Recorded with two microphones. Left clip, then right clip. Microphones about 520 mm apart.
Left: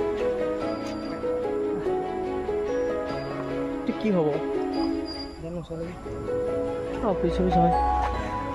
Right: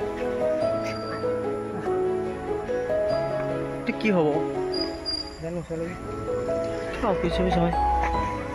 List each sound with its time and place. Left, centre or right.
3.8 s speech: centre
7.2 s speech: centre